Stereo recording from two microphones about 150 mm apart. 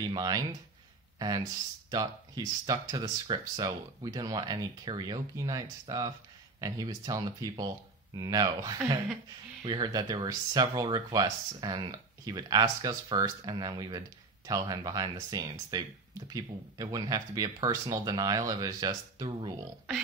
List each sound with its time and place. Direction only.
0.1 s speech: 25° right (ahead or behind)
1.9 s speech: 25° right (ahead or behind)